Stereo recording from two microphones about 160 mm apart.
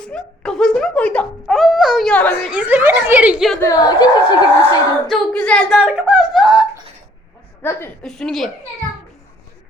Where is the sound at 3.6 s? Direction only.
20° left (ahead or behind).